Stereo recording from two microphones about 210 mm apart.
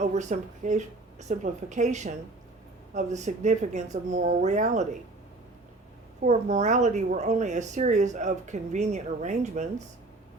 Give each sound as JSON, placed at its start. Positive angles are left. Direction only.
{"t": 0.0, "sound": "a woman's voice", "side_deg": -35}
{"t": 6.2, "sound": "a woman's voice", "side_deg": -35}